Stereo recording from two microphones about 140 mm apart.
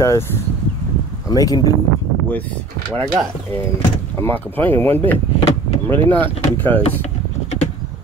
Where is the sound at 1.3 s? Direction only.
25° left (ahead or behind).